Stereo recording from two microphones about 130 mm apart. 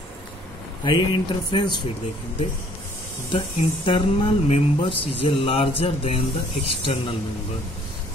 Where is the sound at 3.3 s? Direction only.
45° left (ahead or behind).